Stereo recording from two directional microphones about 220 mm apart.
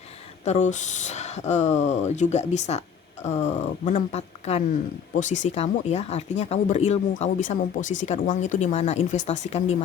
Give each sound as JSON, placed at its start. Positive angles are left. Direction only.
{"t": 0.4, "sound": "speech", "side_deg": 30}